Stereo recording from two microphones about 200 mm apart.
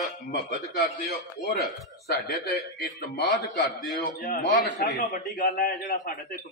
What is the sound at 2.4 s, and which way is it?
A man's voice, 55° left (ahead or behind).